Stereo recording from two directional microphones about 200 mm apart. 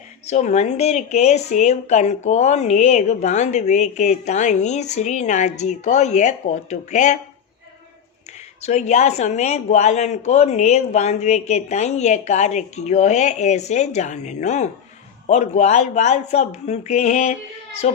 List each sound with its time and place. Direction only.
0.3 s speech: 35° left (ahead or behind)
8.3 s speech: 35° left (ahead or behind)